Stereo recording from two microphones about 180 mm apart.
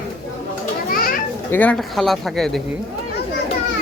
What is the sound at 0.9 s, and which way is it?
Children playing, 55° left (ahead or behind).